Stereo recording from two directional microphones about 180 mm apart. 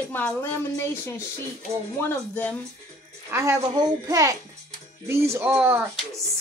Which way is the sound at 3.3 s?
15° right (ahead or behind).